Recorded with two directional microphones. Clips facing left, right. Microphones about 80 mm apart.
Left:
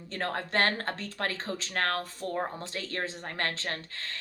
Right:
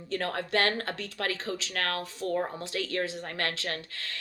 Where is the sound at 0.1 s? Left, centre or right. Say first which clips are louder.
Right 2 dB; left.